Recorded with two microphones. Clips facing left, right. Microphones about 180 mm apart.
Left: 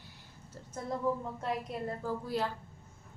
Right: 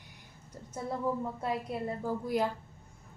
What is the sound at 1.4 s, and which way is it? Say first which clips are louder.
A woman's voice: even; 10° right (ahead or behind).